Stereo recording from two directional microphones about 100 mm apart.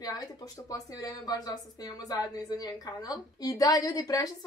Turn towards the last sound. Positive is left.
turn(degrees=35)  # may be behind; listen again after turning